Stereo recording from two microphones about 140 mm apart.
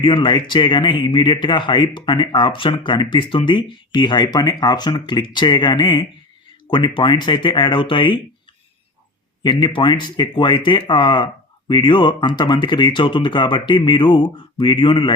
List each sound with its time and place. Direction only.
0.0 s speech: 35° left (ahead or behind)
9.4 s speech: 35° left (ahead or behind)